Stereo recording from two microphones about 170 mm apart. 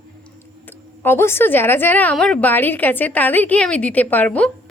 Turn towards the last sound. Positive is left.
turn(degrees=10)  # may be behind; listen again after turning